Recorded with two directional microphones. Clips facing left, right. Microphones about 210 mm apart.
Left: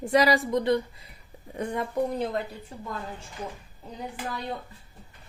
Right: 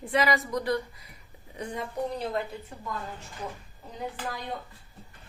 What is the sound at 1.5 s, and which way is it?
Speech, 55° left (ahead or behind).